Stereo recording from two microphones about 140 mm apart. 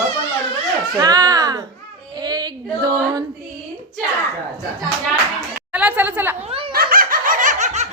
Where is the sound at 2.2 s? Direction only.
30° right (ahead or behind).